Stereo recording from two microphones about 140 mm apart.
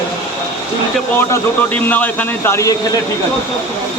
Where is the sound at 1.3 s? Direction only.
10° left (ahead or behind).